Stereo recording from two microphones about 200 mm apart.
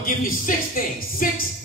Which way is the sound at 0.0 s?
45° left (ahead or behind).